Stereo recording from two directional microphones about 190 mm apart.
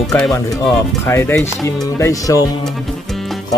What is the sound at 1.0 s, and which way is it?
Speech, 10° left (ahead or behind).